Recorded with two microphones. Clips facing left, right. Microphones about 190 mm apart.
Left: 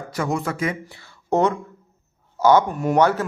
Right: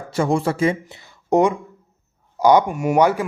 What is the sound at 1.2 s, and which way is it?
Speech, 15° right (ahead or behind).